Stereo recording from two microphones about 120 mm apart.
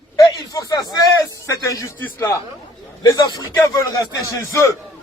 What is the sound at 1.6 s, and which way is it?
Speech, 30° left (ahead or behind).